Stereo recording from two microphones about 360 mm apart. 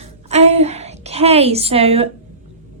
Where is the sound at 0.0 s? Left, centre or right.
Centre.